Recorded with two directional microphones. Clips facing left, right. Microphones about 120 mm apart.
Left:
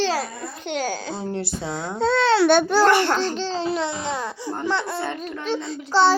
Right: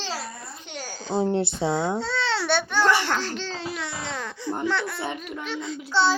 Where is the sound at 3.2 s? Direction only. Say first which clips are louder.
Left 7 dB; 30° left (ahead or behind).